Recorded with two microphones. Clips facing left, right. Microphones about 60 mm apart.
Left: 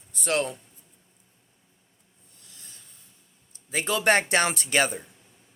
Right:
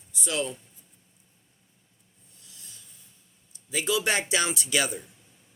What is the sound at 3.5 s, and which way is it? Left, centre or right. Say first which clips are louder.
Speech: even; left.